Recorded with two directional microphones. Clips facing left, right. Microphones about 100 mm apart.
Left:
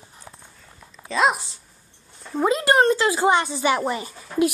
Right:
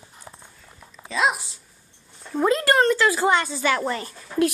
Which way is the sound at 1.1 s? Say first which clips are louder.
Left 3 dB; centre (ahead or behind).